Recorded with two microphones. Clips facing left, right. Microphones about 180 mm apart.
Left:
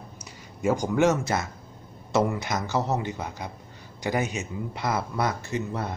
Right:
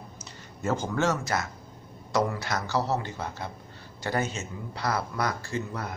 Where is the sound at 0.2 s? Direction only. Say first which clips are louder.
Left 6 dB; 10° left (ahead or behind).